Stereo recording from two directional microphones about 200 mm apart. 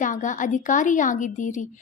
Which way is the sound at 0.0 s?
40° left (ahead or behind).